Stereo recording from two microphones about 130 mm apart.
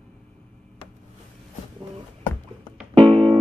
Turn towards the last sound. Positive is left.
turn(degrees=-45)  # may be behind; listen again after turning